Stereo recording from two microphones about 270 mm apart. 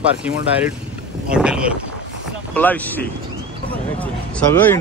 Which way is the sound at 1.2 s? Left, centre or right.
Centre.